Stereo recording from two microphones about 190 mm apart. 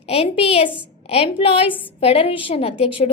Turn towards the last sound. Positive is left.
turn(degrees=30)  # may be behind; listen again after turning